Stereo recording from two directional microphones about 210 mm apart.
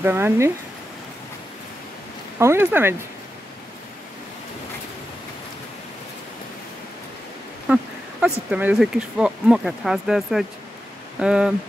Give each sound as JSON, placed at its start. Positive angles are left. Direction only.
{"t": 0.0, "sound": "speech", "side_deg": -10}
{"t": 2.3, "sound": "speech", "side_deg": -10}
{"t": 7.6, "sound": "speech", "side_deg": -5}